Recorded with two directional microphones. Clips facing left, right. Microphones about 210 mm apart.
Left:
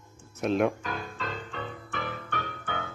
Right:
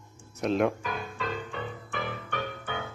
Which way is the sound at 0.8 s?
15° right (ahead or behind).